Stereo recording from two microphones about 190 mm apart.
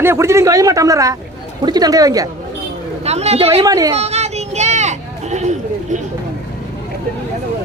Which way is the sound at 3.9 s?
35° right (ahead or behind).